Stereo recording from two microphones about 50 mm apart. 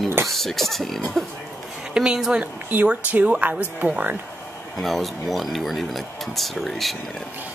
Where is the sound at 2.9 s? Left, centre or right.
Right.